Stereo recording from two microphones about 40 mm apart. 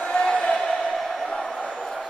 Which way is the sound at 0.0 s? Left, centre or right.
Centre.